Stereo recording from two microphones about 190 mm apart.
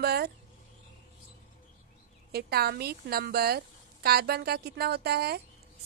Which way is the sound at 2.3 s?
55° right (ahead or behind).